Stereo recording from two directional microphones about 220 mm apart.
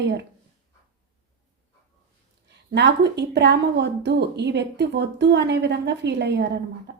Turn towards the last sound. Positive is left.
turn(degrees=-50)  # may be behind; listen again after turning